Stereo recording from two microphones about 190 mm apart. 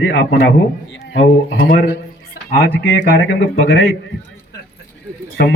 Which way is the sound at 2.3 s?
50° left (ahead or behind).